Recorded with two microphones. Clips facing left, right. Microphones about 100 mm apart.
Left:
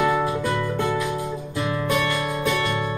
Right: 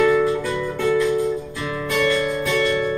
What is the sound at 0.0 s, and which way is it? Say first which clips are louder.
Music: right 4 dB; 20° left (ahead or behind).